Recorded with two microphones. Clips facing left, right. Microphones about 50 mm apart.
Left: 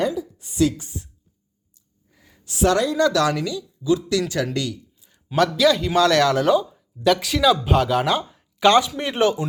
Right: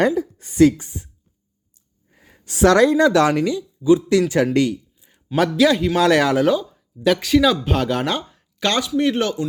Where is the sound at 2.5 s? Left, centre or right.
Right.